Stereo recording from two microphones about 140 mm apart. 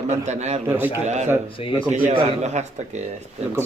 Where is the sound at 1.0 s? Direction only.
55° right (ahead or behind).